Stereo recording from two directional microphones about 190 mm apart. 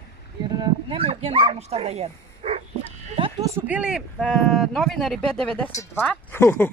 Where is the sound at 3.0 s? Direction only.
25° right (ahead or behind).